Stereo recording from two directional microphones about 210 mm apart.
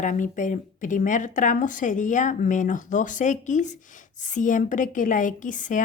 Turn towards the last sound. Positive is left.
turn(degrees=40)  # may be behind; listen again after turning